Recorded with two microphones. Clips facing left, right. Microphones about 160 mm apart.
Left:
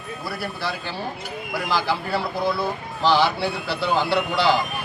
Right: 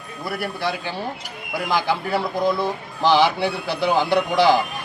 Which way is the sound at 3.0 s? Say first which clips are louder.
Right 2 dB; 15° right (ahead or behind).